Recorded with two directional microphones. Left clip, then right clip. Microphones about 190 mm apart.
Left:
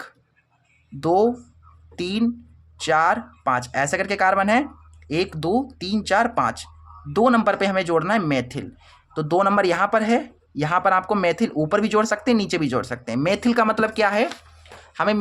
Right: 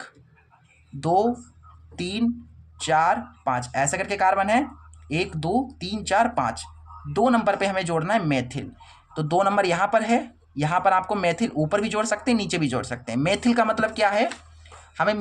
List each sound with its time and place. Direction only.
1.0 s speech: 30° left (ahead or behind)